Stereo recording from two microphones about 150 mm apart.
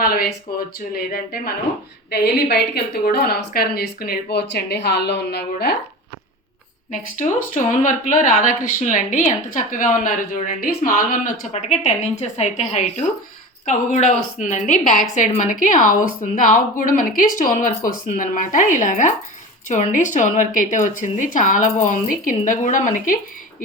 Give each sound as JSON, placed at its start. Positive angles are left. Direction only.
{"t": 0.0, "sound": "a woman's voice", "side_deg": 80}
{"t": 6.9, "sound": "a woman's voice", "side_deg": 55}
{"t": 11.5, "sound": "a woman's voice", "side_deg": 45}